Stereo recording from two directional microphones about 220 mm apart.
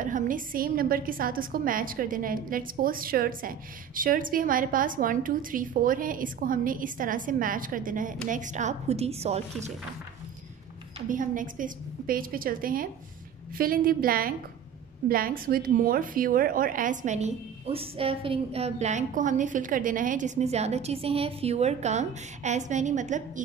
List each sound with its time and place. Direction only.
0.0 s a woman's voice: 35° right (ahead or behind)
11.0 s a woman's voice: 35° right (ahead or behind)